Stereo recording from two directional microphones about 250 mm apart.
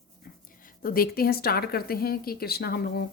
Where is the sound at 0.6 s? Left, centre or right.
Left.